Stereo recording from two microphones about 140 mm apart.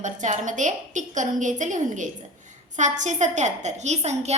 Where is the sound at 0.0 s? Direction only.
60° right (ahead or behind).